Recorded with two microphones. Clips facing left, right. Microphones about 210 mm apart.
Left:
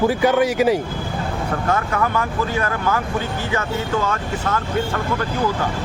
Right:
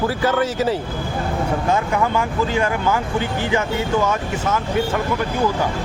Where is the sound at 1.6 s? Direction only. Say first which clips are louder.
Even; 20° right (ahead or behind).